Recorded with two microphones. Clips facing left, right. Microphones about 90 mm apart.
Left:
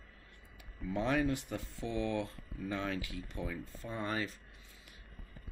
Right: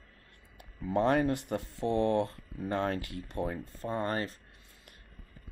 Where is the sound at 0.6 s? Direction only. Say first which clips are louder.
Right 7 dB; 50° right (ahead or behind).